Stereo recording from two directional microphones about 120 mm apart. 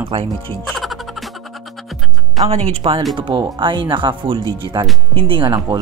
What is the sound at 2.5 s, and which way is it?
Speech, 55° right (ahead or behind).